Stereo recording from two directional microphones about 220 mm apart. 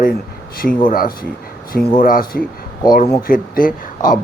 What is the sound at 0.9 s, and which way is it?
Speech, 40° left (ahead or behind).